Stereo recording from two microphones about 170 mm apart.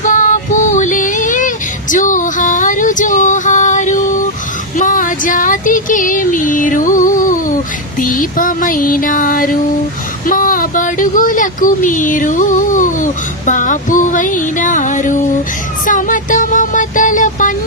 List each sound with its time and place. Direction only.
0.0 s child singing: 50° left (ahead or behind)
10.2 s speech: 55° left (ahead or behind)
15.9 s music: 50° left (ahead or behind)